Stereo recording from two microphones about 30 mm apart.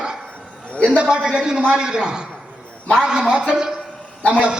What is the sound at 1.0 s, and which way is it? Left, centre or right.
Speech, right.